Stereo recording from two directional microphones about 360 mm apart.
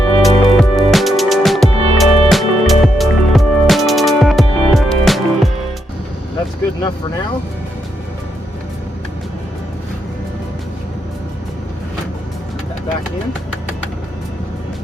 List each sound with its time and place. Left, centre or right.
0.2 s music: centre